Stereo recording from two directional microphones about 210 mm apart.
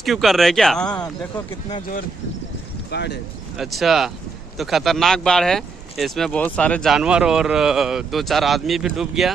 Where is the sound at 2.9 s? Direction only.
55° left (ahead or behind).